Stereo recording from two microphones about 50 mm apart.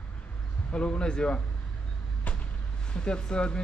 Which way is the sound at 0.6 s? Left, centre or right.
Left.